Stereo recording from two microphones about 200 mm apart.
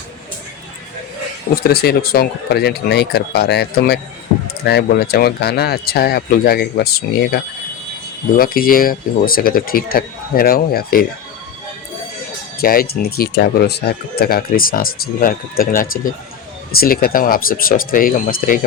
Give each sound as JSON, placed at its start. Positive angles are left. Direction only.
{"t": 1.5, "sound": "speech", "side_deg": 50}
{"t": 12.5, "sound": "speech", "side_deg": 50}